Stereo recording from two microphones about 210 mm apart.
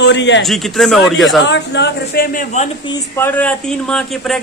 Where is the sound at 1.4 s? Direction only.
55° left (ahead or behind).